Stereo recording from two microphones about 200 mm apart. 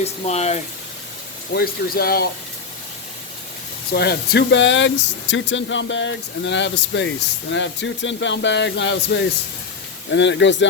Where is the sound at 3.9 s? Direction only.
55° left (ahead or behind).